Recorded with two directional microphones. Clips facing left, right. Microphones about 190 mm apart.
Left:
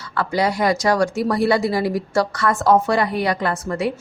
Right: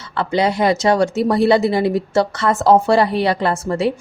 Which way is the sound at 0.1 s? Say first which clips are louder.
Right 3 dB; 25° right (ahead or behind).